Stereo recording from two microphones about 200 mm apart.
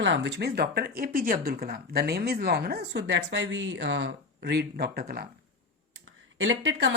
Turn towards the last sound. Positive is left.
turn(degrees=-70)  # may be behind; listen again after turning